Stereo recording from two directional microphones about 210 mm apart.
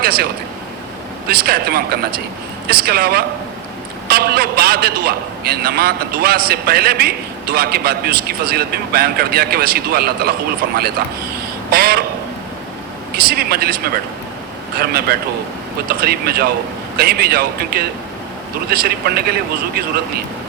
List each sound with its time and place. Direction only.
0.0 s speech: 45° right (ahead or behind)
1.3 s a man's voice: 45° right (ahead or behind)
11.7 s a man's voice: 45° right (ahead or behind)
13.1 s a man's voice: 45° right (ahead or behind)